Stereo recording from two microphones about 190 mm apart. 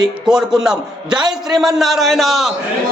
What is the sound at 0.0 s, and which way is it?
A man's voice, 5° right (ahead or behind).